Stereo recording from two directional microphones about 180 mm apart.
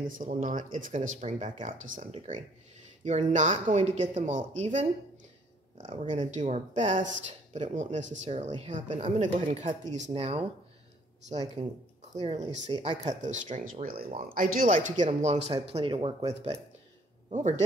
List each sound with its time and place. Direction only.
0.1 s speech: 50° right (ahead or behind)
5.9 s speech: 35° right (ahead or behind)
12.2 s speech: 40° right (ahead or behind)
12.7 s speech: 25° right (ahead or behind)
13.2 s speech: 45° right (ahead or behind)